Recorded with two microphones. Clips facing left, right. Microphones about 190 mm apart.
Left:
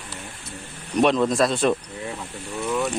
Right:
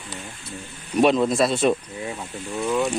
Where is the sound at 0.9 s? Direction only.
5° right (ahead or behind).